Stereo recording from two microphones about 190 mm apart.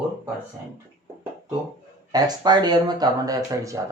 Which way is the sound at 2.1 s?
20° right (ahead or behind).